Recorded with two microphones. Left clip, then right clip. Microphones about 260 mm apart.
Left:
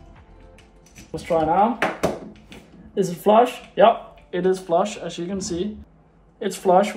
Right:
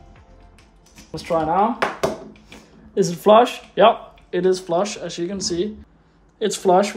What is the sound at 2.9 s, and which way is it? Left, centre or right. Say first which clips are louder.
Speech: right 3 dB; right.